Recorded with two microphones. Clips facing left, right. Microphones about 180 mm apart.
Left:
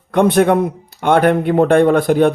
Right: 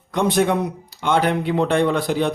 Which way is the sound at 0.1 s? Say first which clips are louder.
Left 6 dB; 60° left (ahead or behind).